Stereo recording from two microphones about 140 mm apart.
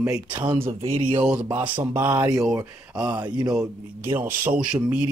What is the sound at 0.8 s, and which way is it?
Speech, 45° right (ahead or behind).